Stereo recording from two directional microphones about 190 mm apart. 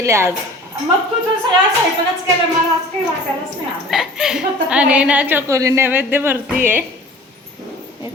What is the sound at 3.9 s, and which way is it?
Speech, centre (ahead or behind).